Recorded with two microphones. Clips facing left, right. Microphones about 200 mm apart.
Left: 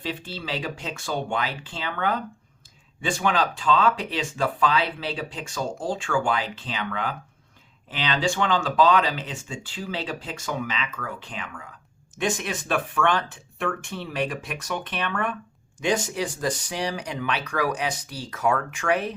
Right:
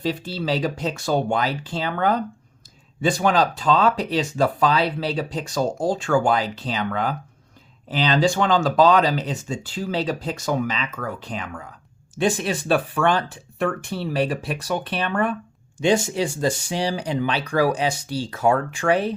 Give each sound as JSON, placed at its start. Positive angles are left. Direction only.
{"t": 0.0, "sound": "speech", "side_deg": -40}